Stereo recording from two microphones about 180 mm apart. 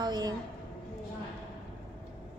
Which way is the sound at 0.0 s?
25° right (ahead or behind).